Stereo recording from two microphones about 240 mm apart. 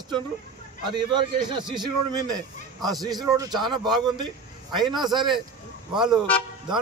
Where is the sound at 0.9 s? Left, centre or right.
Centre.